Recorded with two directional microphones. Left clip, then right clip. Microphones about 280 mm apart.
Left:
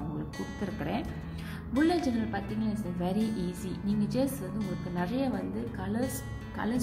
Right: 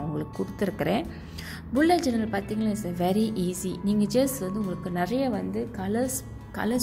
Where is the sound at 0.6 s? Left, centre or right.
Right.